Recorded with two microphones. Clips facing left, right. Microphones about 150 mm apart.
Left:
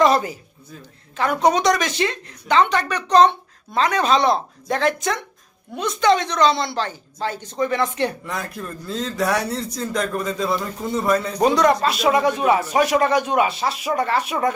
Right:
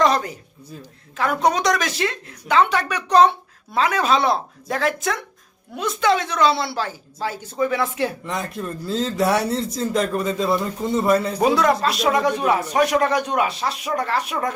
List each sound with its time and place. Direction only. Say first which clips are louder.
0.0 s a sound: left 2 dB; 5° left (ahead or behind)
0.8 s a woman's voice: left 1 dB; centre (ahead or behind)
8.8 s speech: right 3 dB; 30° right (ahead or behind)
9.4 s a woman's voice: right 3 dB; centre (ahead or behind)
9.6 s speech: right 3 dB; 30° right (ahead or behind)
10.0 s a woman's voice: even; 5° right (ahead or behind)